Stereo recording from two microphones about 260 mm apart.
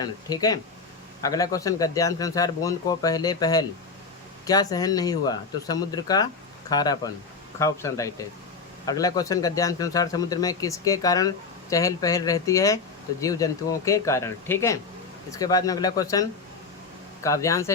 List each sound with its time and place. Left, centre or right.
0.0 s speech: centre